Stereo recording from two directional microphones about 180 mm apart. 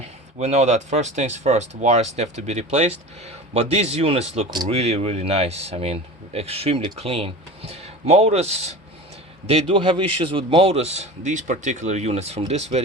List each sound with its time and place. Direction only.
0.0 s a man's voice: 40° right (ahead or behind)